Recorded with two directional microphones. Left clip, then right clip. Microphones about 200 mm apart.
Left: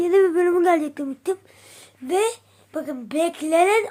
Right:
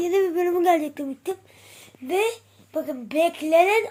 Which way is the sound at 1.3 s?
15° left (ahead or behind).